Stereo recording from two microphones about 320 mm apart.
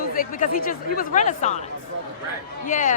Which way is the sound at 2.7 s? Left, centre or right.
Left.